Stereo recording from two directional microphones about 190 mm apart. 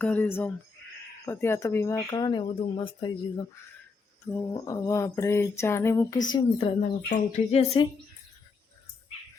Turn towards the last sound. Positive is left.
turn(degrees=30)  # may be behind; listen again after turning